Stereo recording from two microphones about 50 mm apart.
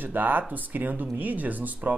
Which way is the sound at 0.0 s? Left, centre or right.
Right.